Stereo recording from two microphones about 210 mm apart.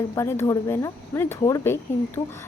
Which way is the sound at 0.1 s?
15° left (ahead or behind).